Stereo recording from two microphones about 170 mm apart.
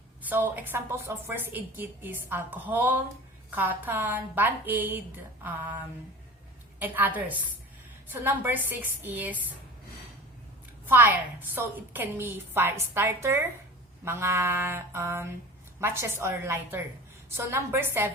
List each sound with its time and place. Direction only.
0.2 s a woman's voice: 10° right (ahead or behind)
5.4 s a sound: 10° right (ahead or behind)
6.7 s a woman's voice: 10° right (ahead or behind)
10.8 s a woman's voice: 15° right (ahead or behind)